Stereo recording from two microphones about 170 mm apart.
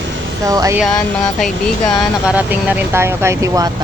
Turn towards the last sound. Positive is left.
turn(degrees=-20)  # may be behind; listen again after turning